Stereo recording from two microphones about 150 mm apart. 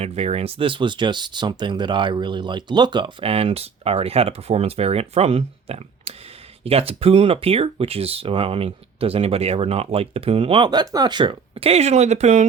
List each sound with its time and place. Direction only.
0.0 s speech: 45° right (ahead or behind)